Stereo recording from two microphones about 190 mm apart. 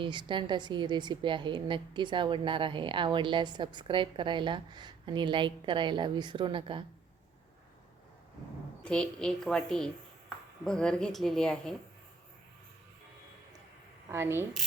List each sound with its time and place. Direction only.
0.0 s a woman's voice: 25° right (ahead or behind)
8.8 s a woman's voice: 5° left (ahead or behind)
14.1 s speech: 10° right (ahead or behind)